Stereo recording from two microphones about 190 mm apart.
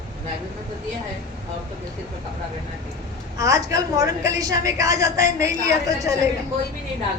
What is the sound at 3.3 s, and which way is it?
A woman's voice, 15° right (ahead or behind).